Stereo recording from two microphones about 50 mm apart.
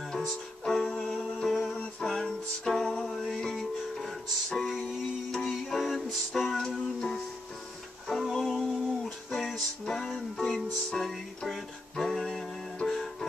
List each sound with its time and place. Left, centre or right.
0.2 s music: centre
5.3 s music: centre